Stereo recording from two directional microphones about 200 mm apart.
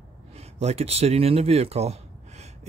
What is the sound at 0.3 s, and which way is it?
Speech, 30° right (ahead or behind).